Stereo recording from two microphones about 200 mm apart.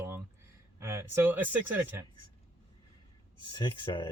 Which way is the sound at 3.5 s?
25° left (ahead or behind).